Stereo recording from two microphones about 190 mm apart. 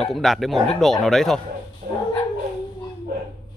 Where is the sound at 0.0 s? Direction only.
Centre (ahead or behind).